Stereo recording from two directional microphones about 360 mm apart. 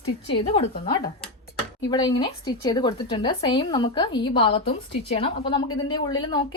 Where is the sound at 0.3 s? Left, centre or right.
Centre.